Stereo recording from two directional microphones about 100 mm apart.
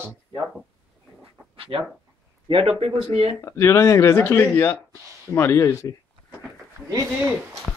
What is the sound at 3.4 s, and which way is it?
Speech, 35° left (ahead or behind).